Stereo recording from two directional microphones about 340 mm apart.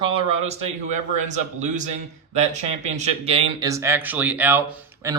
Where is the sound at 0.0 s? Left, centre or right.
Centre.